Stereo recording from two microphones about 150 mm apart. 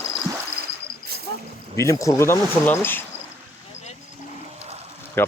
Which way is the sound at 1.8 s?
20° left (ahead or behind).